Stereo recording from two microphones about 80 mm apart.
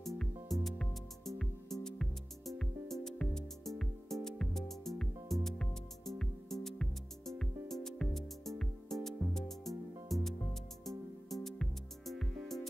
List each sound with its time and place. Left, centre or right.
0.0 s music: centre